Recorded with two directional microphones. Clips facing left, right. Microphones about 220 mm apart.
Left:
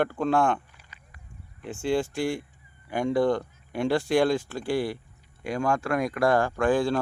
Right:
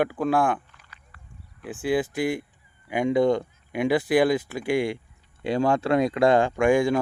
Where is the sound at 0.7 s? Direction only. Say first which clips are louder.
Even; 15° left (ahead or behind).